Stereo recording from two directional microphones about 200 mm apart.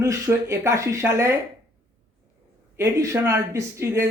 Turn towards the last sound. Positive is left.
turn(degrees=-15)  # may be behind; listen again after turning